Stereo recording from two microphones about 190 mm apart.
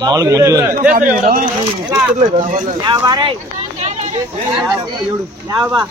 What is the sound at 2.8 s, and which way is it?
Speech, 25° right (ahead or behind).